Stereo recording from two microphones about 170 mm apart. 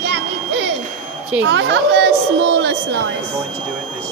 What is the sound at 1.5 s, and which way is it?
A woman's voice, 85° right.